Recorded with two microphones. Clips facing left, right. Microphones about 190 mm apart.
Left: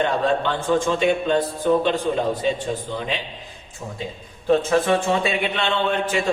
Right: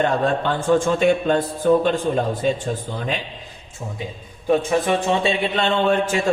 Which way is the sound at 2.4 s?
45° right (ahead or behind).